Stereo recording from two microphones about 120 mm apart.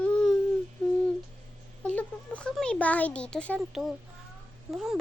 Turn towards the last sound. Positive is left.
turn(degrees=-5)  # may be behind; listen again after turning